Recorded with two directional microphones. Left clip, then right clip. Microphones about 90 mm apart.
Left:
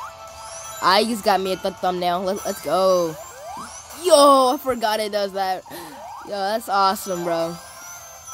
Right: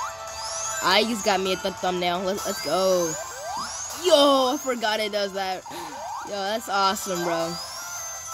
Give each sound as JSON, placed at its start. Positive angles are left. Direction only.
{"t": 0.7, "sound": "speech", "side_deg": 50}